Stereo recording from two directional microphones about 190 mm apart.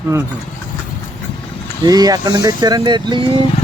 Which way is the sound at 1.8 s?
20° right (ahead or behind).